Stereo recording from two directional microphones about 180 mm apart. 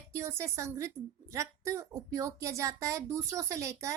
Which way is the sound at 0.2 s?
15° right (ahead or behind).